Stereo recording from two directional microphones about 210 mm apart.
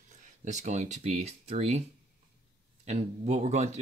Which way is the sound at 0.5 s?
35° right (ahead or behind).